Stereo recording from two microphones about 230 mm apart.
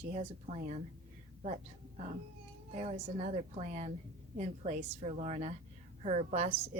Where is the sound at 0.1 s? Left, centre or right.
Right.